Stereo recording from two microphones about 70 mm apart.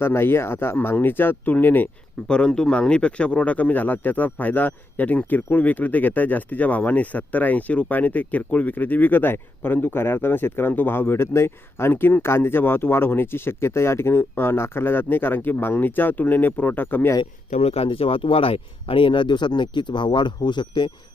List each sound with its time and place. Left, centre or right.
0.0 s speech: left
2.2 s speech: centre; by 17.2 s left
19.3 s speech: left